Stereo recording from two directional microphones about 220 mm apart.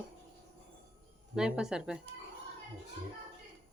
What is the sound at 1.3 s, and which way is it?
Speech, 5° right (ahead or behind).